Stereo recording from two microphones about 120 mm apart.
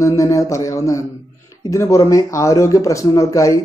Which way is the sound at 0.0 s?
25° left (ahead or behind).